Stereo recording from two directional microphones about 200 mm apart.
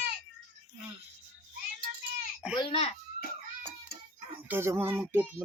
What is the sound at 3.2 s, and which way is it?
Cat, 55° left (ahead or behind).